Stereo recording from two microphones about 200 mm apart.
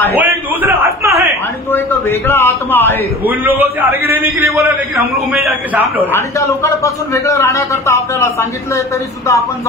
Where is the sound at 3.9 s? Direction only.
50° left (ahead or behind).